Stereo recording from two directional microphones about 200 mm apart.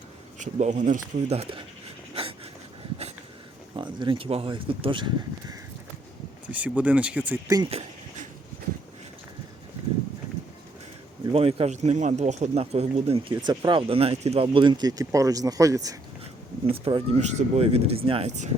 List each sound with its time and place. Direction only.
0.3 s speech: 35° right (ahead or behind)
3.8 s speech: 25° right (ahead or behind)
6.5 s speech: 5° right (ahead or behind)
7.5 s a sound: 25° right (ahead or behind)
11.3 s speech: 25° right (ahead or behind)
16.6 s speech: 25° right (ahead or behind)